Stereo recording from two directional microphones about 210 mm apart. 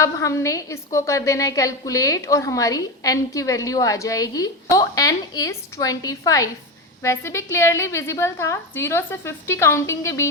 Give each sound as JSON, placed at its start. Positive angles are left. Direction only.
{"t": 0.0, "sound": "a woman's voice", "side_deg": 15}